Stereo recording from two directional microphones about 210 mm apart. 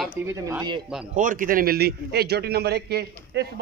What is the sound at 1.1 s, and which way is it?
A man's voice, 40° right (ahead or behind).